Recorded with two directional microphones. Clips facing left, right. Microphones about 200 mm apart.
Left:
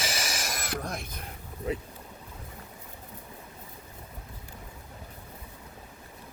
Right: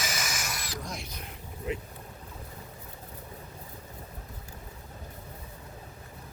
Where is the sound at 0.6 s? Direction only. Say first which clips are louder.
Left 4 dB; 60° left (ahead or behind).